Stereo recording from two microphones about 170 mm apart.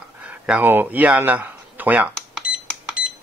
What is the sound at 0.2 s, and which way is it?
A man's voice, 10° right (ahead or behind).